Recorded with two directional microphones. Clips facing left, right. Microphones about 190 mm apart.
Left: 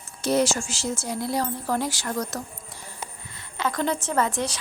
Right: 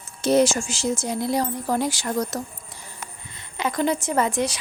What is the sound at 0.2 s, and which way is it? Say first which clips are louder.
Speech: right 4 dB; 20° right (ahead or behind).